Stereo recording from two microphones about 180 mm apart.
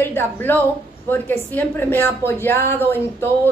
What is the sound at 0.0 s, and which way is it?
Speech, 10° left (ahead or behind).